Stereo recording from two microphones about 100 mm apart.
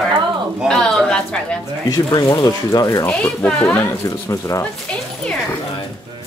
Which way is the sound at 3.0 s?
15° left (ahead or behind).